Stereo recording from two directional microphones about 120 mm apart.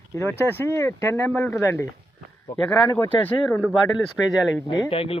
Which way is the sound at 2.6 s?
5° left (ahead or behind).